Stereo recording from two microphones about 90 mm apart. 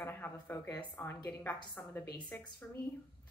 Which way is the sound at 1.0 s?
25° left (ahead or behind).